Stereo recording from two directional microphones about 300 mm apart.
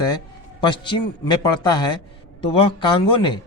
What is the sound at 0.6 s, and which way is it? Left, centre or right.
A man's voice, centre.